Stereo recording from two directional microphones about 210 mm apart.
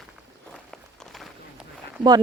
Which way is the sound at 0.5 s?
Centre (ahead or behind).